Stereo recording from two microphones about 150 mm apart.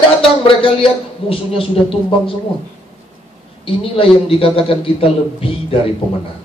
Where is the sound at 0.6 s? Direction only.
40° left (ahead or behind).